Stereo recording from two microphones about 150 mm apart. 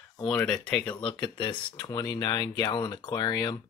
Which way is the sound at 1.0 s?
35° left (ahead or behind).